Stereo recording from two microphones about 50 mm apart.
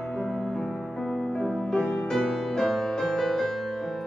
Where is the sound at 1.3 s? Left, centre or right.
Centre.